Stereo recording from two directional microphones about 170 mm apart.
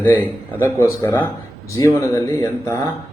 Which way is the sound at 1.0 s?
15° left (ahead or behind).